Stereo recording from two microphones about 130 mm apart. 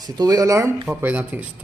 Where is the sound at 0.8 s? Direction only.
10° right (ahead or behind).